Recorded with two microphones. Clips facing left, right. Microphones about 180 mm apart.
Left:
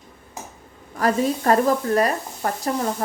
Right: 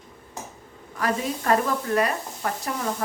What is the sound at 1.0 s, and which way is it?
Sizzle, 40° left (ahead or behind).